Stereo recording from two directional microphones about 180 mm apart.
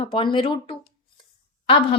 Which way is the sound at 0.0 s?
25° left (ahead or behind).